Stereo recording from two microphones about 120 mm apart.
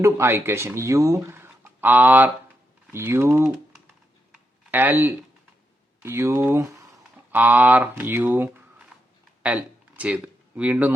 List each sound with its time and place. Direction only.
0.0 s speech: 20° right (ahead or behind)
4.3 s a sound: 15° right (ahead or behind)
6.0 s speech: 20° right (ahead or behind)